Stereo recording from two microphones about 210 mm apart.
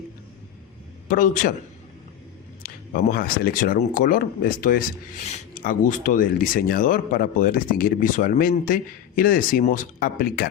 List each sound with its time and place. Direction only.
1.0 s speech: 40° left (ahead or behind)
2.6 s speech: 45° left (ahead or behind)